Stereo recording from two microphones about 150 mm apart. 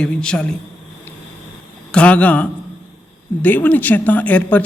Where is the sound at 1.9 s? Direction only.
10° left (ahead or behind).